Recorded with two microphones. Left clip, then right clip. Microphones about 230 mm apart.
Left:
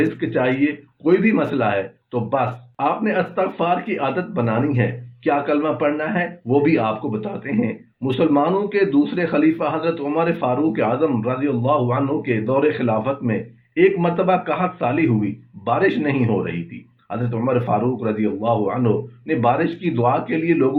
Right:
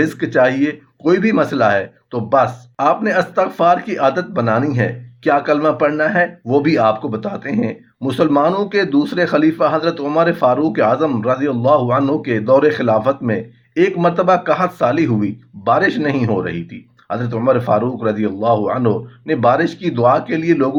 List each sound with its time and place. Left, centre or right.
0.2 s speech: right